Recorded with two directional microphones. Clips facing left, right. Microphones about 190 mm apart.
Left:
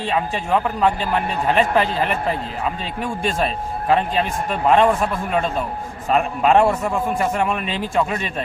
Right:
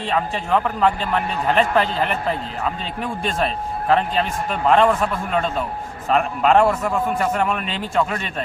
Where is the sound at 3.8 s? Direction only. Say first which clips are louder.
Even; 10° left (ahead or behind).